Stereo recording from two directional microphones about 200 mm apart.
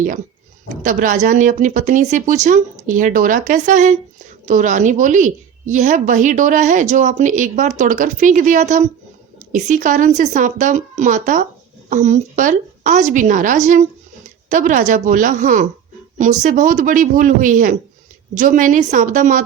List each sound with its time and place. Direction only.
0.8 s a woman's voice: 40° right (ahead or behind)